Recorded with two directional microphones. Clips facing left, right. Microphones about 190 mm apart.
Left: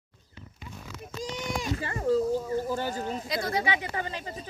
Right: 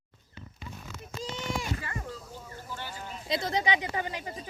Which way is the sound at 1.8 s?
35° left (ahead or behind).